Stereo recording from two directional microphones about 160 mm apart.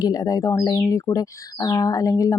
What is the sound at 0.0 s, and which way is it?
Speech, 25° left (ahead or behind).